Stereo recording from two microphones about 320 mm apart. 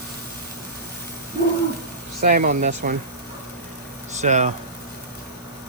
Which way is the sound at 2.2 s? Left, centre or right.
Right.